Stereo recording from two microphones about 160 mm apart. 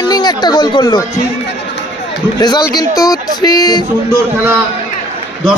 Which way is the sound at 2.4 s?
25° left (ahead or behind).